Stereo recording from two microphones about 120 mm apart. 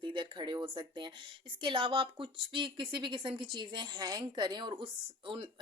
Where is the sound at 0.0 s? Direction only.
40° right (ahead or behind).